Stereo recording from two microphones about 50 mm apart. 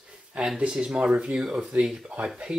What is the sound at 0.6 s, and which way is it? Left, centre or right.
Speech, centre.